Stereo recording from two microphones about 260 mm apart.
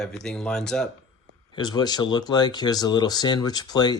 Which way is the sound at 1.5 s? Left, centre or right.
Centre.